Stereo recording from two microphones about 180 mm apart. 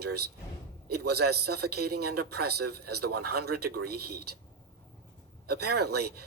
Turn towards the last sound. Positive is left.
turn(degrees=-65)  # may be behind; listen again after turning